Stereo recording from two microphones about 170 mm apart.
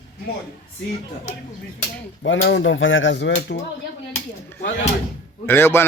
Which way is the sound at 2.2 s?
90° left.